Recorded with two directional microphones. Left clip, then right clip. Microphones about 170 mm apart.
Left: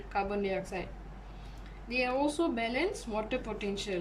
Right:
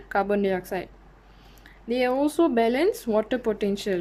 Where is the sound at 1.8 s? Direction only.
45° right (ahead or behind).